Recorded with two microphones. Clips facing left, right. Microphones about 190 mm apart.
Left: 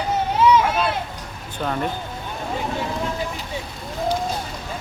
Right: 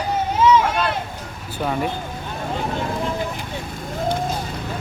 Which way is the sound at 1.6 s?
5° right (ahead or behind).